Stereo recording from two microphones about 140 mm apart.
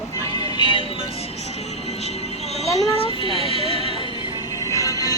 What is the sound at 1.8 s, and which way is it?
Speech, 50° left (ahead or behind).